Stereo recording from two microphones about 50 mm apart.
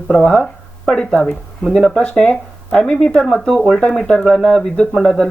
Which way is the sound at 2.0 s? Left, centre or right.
Left.